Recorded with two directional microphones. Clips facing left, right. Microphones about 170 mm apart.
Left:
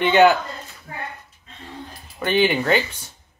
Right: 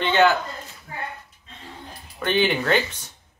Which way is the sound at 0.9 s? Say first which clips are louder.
Left 2 dB; 35° left (ahead or behind).